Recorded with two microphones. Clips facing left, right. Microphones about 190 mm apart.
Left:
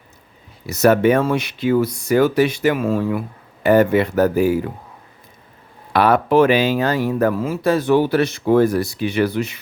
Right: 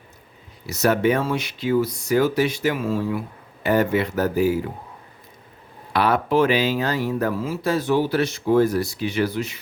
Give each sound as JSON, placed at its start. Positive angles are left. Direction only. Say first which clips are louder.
{"t": 0.7, "sound": "speech", "louder": "left 5 dB", "side_deg": 55}
{"t": 5.9, "sound": "speech", "louder": "left 5 dB", "side_deg": 55}